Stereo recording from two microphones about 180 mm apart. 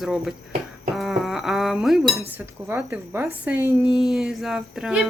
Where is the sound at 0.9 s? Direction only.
Centre (ahead or behind).